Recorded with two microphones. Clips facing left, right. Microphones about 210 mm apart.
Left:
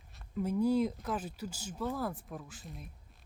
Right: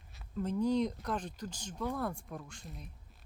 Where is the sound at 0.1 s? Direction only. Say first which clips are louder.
Left 2 dB; 5° left (ahead or behind).